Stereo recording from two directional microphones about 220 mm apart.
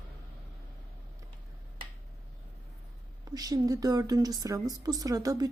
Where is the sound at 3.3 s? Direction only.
15° right (ahead or behind).